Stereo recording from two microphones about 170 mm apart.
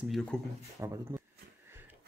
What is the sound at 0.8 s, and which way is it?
Speech, 15° right (ahead or behind).